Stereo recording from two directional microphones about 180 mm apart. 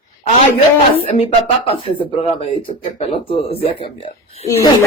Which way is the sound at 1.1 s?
30° left (ahead or behind).